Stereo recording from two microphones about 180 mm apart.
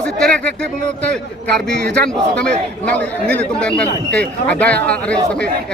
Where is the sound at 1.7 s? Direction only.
65° right (ahead or behind).